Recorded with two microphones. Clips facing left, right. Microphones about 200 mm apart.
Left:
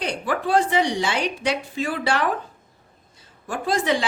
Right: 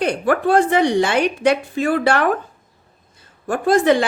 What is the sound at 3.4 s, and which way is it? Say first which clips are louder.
Speech: right 8 dB; 55° right (ahead or behind).